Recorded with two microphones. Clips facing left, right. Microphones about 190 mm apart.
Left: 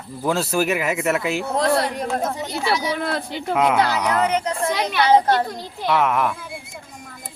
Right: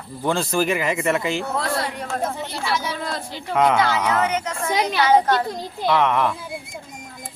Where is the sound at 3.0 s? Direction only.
60° left (ahead or behind).